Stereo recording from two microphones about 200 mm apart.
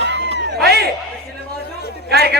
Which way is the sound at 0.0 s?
60° right (ahead or behind).